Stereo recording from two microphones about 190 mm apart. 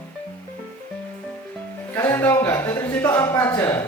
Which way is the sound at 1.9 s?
15° left (ahead or behind).